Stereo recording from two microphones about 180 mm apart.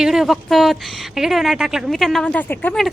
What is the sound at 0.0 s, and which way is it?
Speech, centre (ahead or behind).